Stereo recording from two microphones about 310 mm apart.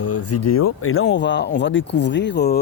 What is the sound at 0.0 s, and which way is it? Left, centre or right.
Speech, left.